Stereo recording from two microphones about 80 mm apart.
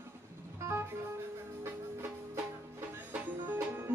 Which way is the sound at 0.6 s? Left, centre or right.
Right.